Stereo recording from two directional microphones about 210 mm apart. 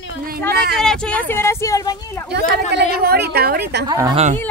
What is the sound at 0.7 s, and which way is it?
Speech, 5° left (ahead or behind).